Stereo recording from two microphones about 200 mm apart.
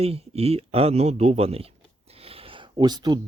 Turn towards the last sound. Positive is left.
turn(degrees=-20)  # may be behind; listen again after turning